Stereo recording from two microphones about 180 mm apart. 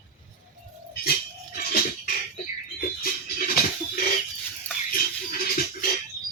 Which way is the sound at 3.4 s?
50° left (ahead or behind).